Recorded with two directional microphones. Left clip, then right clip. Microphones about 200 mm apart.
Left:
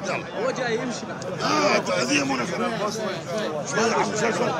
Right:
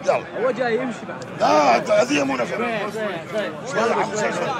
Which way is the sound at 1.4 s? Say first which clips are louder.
Right 6 dB; centre (ahead or behind).